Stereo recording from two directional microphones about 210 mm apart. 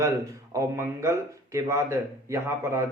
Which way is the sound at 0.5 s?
15° right (ahead or behind).